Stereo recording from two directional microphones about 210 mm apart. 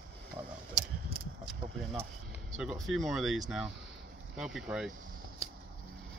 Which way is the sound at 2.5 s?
Centre (ahead or behind).